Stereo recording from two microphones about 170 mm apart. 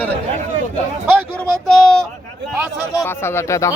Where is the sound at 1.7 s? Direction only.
5° left (ahead or behind).